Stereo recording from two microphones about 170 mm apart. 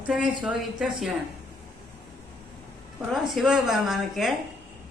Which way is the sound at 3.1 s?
Centre (ahead or behind).